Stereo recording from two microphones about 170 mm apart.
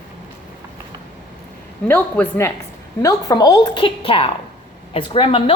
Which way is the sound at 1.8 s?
10° left (ahead or behind).